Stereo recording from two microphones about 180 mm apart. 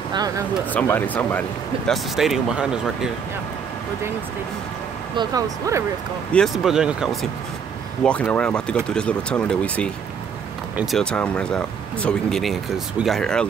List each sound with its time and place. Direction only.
0.1 s speech: 20° right (ahead or behind)
0.7 s speech: 10° left (ahead or behind)
1.9 s speech: centre (ahead or behind)
5.1 s speech: 20° right (ahead or behind)
6.3 s speech: centre (ahead or behind)
8.0 s speech: 5° left (ahead or behind)